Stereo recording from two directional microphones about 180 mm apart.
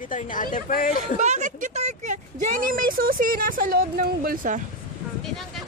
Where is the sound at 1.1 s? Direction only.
40° right (ahead or behind).